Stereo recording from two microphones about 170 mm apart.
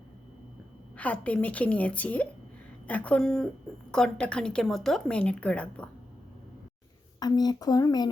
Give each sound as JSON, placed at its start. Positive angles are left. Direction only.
{"t": 0.9, "sound": "a woman's voice", "side_deg": 10}
{"t": 7.2, "sound": "speech", "side_deg": 25}